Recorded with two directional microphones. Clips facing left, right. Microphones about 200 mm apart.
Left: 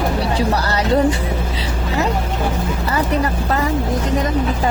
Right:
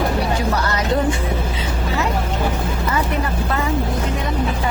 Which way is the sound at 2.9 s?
40° left (ahead or behind).